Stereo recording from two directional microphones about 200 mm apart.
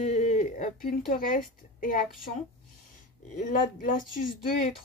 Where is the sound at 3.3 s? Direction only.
40° left (ahead or behind).